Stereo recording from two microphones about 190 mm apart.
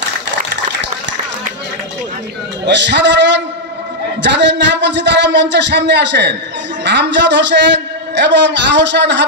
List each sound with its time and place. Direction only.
2.6 s a man's voice: 65° right (ahead or behind)